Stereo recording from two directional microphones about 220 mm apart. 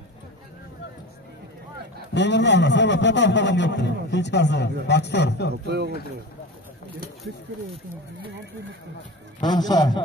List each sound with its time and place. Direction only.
2.1 s a man's voice: 55° left (ahead or behind)
9.4 s a man's voice: 20° left (ahead or behind)